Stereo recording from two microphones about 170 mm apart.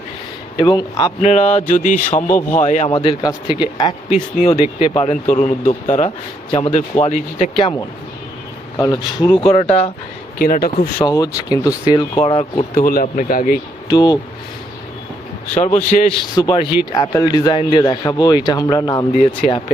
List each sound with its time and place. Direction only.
0.5 s a man's voice: 25° left (ahead or behind)
1.2 s a sound: 45° left (ahead or behind)
2.9 s speech: 30° left (ahead or behind)
6.5 s a man's voice: 30° left (ahead or behind)
7.0 s a man's voice: 45° left (ahead or behind); by 9.3 s 20° left (ahead or behind)
9.6 s speech: 35° left (ahead or behind)
10.3 s speech: 60° left (ahead or behind)
11.0 s a man's voice: 20° left (ahead or behind)
12.2 s speech: 35° left (ahead or behind)
12.7 s speech: 60° left (ahead or behind)
13.9 s a man's voice: 25° left (ahead or behind)
15.5 s speech: 40° left (ahead or behind)
16.3 s a man's voice: 25° left (ahead or behind)
19.1 s a sound: 45° left (ahead or behind)